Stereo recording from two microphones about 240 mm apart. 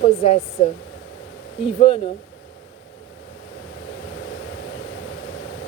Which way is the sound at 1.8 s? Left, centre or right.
Left.